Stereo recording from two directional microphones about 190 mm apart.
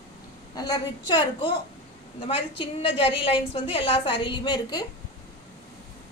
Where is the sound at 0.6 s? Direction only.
20° left (ahead or behind).